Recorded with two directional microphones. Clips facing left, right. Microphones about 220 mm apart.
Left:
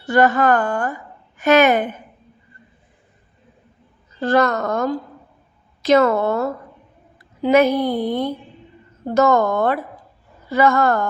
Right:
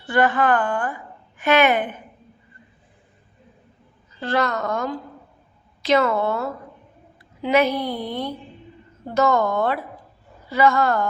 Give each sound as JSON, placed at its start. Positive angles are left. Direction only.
{"t": 0.0, "sound": "a woman's voice", "side_deg": 40}
{"t": 4.2, "sound": "a woman's voice", "side_deg": 45}